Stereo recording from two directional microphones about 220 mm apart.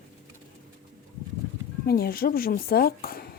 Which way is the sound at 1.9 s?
45° left (ahead or behind).